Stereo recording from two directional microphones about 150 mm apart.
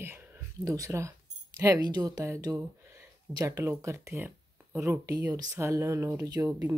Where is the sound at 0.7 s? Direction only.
20° right (ahead or behind).